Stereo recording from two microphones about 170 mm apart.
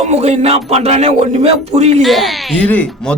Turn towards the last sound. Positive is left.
turn(degrees=10)  # may be behind; listen again after turning